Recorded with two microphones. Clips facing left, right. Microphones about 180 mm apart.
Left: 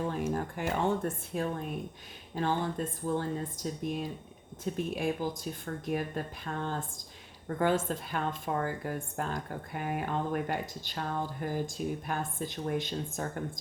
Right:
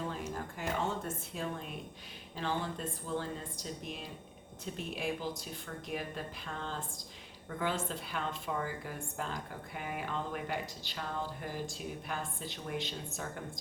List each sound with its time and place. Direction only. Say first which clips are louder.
0.1 s speech: left 7 dB; 55° left (ahead or behind)